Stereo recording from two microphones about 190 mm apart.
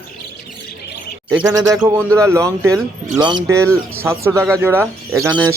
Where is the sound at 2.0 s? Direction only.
15° right (ahead or behind).